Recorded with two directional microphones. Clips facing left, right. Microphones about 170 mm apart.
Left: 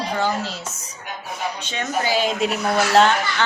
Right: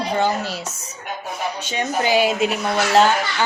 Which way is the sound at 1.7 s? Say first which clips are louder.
Right 4 dB; 15° right (ahead or behind).